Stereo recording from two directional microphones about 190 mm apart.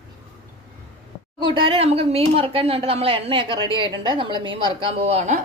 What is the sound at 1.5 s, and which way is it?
Speech, 30° right (ahead or behind).